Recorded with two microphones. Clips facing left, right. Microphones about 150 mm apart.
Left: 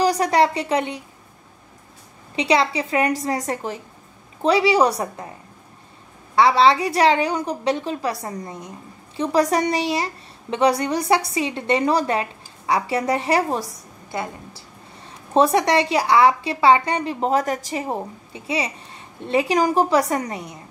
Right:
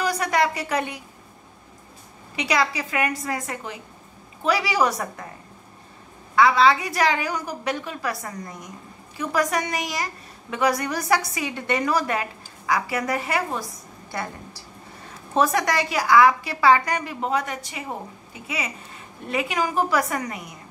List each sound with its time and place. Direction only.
0.0 s a woman's voice: 35° left (ahead or behind)
2.3 s a woman's voice: 30° left (ahead or behind)
6.3 s a woman's voice: 30° left (ahead or behind)
15.3 s a woman's voice: 30° left (ahead or behind)